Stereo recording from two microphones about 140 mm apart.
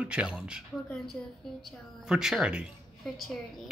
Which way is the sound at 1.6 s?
5° right (ahead or behind).